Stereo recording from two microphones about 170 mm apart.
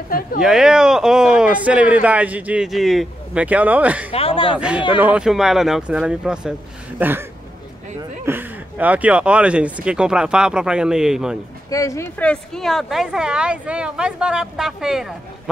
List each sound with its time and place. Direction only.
0.4 s speech: 5° right (ahead or behind)
4.1 s speech: 35° left (ahead or behind)
4.6 s speech: 5° right (ahead or behind)
8.3 s speech: 10° right (ahead or behind)
11.7 s speech: 20° left (ahead or behind); by 15.5 s centre (ahead or behind)